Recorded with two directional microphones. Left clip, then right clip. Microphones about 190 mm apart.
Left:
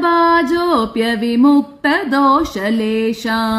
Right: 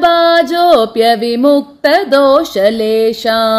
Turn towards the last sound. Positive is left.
turn(degrees=-15)  # may be behind; listen again after turning